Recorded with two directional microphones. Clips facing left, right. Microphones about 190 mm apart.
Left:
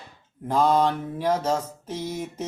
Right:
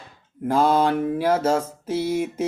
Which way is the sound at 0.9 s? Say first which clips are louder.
Right 9 dB; 75° right (ahead or behind).